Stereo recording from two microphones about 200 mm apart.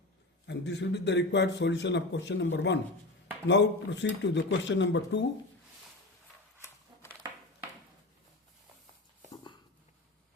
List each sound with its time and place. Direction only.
0.4 s a man's voice: 60° left (ahead or behind)